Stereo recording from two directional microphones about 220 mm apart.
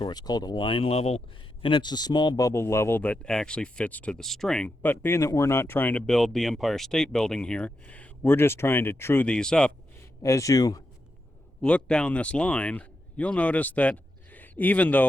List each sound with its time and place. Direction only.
0.0 s speech: 20° left (ahead or behind)
10.2 s speech: 15° left (ahead or behind)
11.6 s speech: 5° left (ahead or behind)